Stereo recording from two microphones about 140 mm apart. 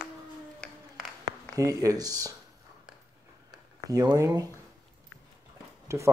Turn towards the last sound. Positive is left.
turn(degrees=-20)  # may be behind; listen again after turning